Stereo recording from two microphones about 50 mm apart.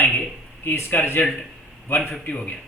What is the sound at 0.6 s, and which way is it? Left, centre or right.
Speech, left.